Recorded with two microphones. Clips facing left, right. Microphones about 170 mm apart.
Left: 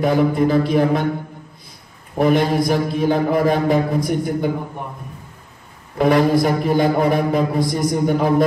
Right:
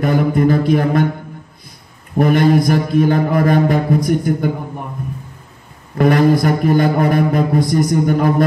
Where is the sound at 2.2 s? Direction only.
50° right (ahead or behind).